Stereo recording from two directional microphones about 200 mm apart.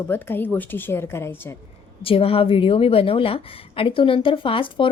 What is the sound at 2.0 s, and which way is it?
A woman's voice, 30° left (ahead or behind).